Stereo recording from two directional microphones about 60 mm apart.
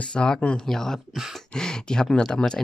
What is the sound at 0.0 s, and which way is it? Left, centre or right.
Speech, centre.